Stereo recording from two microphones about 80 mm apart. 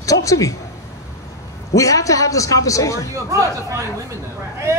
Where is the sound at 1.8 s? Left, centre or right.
Left.